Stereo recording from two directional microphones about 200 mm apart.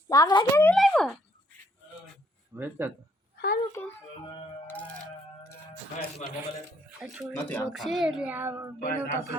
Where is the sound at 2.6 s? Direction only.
10° right (ahead or behind).